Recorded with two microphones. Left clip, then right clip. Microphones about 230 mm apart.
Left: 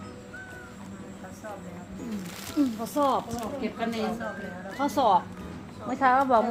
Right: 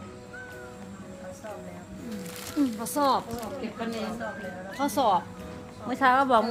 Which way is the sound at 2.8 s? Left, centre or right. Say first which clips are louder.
Right 1 dB; right.